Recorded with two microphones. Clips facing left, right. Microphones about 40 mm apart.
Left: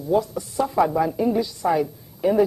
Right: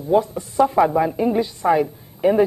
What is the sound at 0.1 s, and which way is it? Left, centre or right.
A man's voice, right.